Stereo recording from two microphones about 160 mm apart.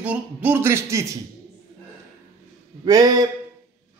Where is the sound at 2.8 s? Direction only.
25° right (ahead or behind).